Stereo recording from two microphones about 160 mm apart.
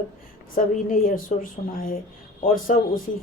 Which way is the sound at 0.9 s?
60° left (ahead or behind).